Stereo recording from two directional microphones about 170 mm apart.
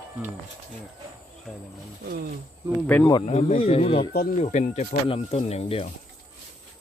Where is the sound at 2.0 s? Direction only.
70° right (ahead or behind).